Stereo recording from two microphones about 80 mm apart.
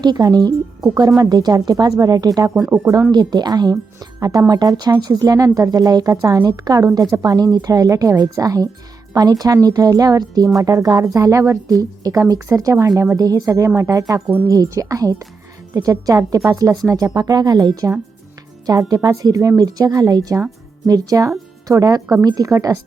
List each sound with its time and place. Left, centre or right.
0.0 s speech: right